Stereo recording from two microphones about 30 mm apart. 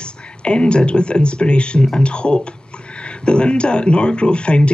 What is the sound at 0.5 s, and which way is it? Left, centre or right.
Speech, left.